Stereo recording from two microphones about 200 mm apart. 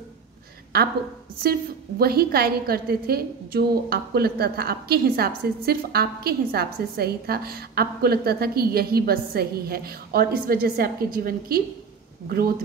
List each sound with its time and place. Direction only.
1.4 s a woman's voice: 50° right (ahead or behind)